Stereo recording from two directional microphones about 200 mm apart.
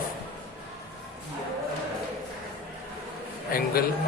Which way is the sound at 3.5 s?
45° left (ahead or behind).